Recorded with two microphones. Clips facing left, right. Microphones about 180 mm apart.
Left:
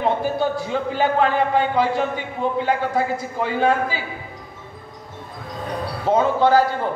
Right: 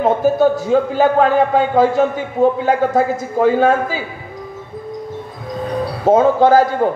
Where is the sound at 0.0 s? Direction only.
45° right (ahead or behind).